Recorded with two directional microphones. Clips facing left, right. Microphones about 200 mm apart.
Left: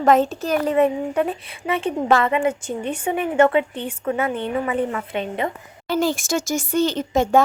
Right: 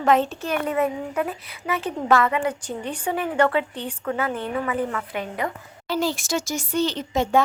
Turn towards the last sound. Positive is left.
turn(degrees=50)  # may be behind; listen again after turning